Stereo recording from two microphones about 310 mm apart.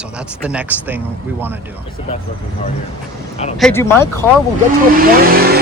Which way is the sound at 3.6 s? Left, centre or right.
Centre.